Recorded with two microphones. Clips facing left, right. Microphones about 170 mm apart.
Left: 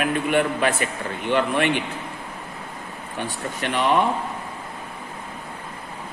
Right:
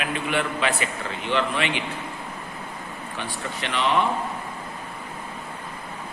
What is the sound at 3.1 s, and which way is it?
Speech, 50° left (ahead or behind).